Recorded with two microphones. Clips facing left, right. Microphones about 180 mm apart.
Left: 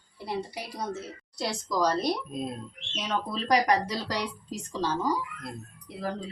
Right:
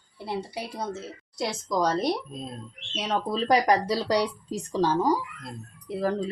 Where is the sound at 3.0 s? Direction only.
35° right (ahead or behind).